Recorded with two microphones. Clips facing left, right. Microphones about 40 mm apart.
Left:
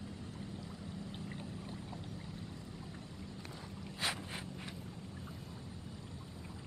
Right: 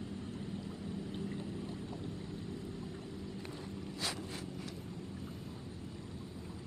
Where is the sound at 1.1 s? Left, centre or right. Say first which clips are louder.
Right 5 dB; centre.